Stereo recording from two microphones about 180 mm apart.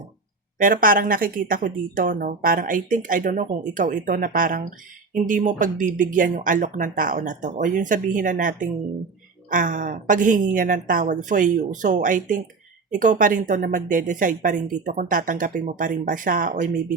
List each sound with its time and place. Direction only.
0.6 s speech: 50° right (ahead or behind)